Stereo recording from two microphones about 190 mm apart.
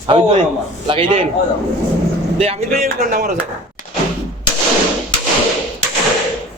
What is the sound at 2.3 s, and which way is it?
A man's voice, 30° right (ahead or behind).